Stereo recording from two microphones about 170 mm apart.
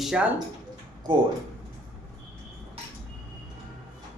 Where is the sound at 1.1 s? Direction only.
30° right (ahead or behind).